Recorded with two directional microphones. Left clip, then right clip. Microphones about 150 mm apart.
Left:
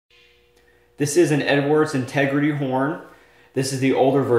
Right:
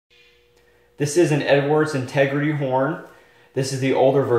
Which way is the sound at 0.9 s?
25° left (ahead or behind).